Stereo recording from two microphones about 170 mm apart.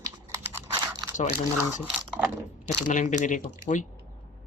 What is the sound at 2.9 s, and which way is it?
Speech, 45° left (ahead or behind).